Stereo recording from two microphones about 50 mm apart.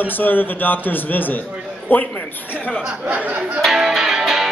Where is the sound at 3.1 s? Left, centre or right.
Right.